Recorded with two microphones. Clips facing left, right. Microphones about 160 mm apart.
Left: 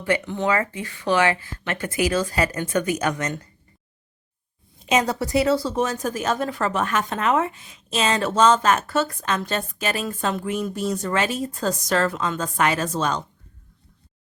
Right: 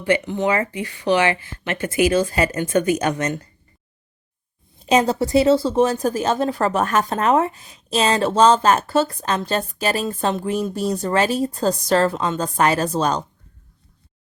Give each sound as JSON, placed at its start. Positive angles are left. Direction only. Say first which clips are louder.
{"t": 0.0, "sound": "speech", "louder": "right 3 dB", "side_deg": -15}
{"t": 4.9, "sound": "a woman's voice", "louder": "right 4 dB", "side_deg": -30}